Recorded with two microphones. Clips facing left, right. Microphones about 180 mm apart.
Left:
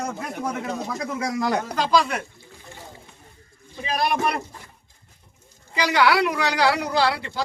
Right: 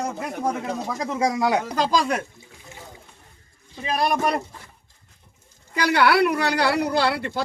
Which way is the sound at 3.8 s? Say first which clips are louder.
Right 1 dB; 45° right (ahead or behind).